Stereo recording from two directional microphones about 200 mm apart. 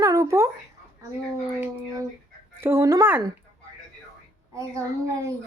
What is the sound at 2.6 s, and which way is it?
Speech, 15° right (ahead or behind).